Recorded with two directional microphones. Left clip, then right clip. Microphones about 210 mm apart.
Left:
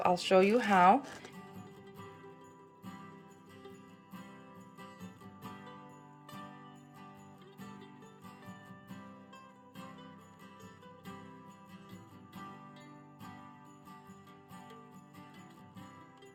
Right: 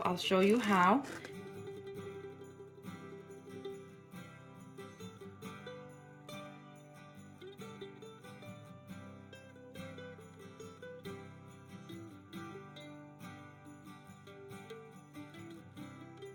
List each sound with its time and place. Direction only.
0.0 s speech: 5° left (ahead or behind)